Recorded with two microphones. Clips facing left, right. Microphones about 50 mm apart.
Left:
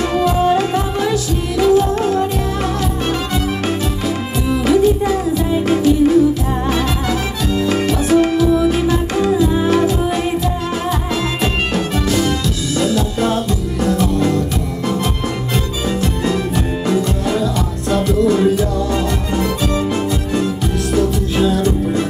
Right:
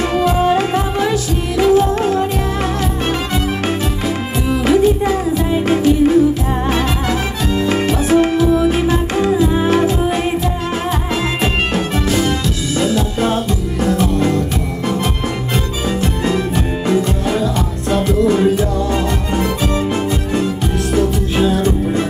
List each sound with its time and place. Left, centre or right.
0.0 s music: right
4.5 s music: right
16.8 s music: right
20.9 s music: right